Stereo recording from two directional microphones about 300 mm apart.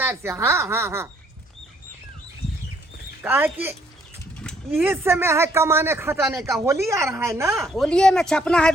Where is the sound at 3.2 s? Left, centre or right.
Centre.